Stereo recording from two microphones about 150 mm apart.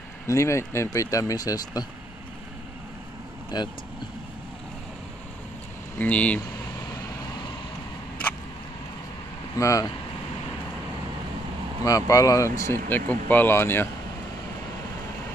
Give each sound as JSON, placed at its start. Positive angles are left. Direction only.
{"t": 0.3, "sound": "speech", "side_deg": 20}
{"t": 3.5, "sound": "speech", "side_deg": 30}
{"t": 5.9, "sound": "speech", "side_deg": 10}
{"t": 9.6, "sound": "speech", "side_deg": 20}
{"t": 11.8, "sound": "speech", "side_deg": 25}